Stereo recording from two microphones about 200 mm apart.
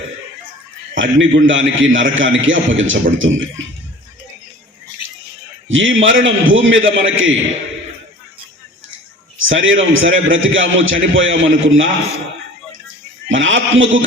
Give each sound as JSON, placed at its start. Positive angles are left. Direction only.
{"t": 0.9, "sound": "a man's voice", "side_deg": -70}
{"t": 5.6, "sound": "a man's voice", "side_deg": -75}
{"t": 9.4, "sound": "a man's voice", "side_deg": -75}
{"t": 13.3, "sound": "a man's voice", "side_deg": -75}